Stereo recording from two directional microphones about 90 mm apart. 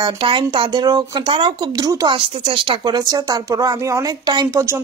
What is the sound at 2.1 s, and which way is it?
Speech, 70° right (ahead or behind).